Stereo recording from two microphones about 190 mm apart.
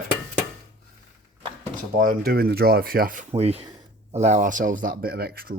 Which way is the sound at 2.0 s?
55° right (ahead or behind).